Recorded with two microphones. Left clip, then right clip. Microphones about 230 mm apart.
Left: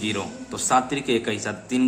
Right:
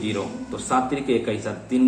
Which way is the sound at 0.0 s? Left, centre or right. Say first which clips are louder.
Right 1 dB; left.